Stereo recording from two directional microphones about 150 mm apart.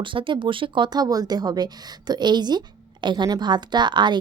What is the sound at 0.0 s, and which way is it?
Speech, 35° right (ahead or behind).